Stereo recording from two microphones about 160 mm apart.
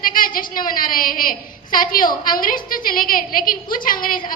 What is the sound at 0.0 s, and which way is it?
A woman's voice, 60° left (ahead or behind).